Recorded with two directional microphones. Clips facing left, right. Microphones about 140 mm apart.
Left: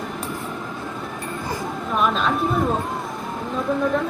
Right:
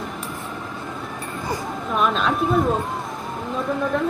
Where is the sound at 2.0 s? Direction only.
Centre (ahead or behind).